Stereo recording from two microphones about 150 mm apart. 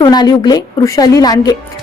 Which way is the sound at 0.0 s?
30° left (ahead or behind).